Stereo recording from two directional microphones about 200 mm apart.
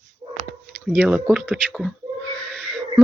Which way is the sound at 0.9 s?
5° right (ahead or behind).